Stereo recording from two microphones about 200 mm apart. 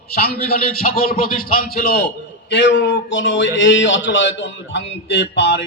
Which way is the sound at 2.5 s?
60° left (ahead or behind).